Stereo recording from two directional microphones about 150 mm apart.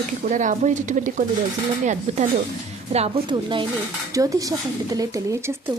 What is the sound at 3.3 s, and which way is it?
Speech, 35° right (ahead or behind).